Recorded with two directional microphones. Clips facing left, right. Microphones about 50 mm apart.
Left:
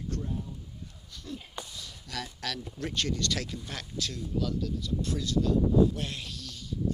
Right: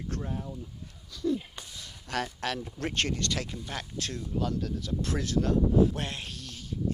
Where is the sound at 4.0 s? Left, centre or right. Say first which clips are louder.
Left 1 dB; right.